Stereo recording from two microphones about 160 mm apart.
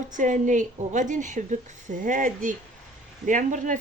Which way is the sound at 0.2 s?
50° right (ahead or behind).